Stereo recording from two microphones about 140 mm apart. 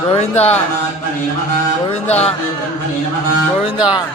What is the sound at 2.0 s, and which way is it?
Music, 50° left (ahead or behind).